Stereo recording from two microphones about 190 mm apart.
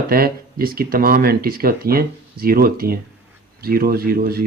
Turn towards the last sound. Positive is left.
turn(degrees=-50)  # may be behind; listen again after turning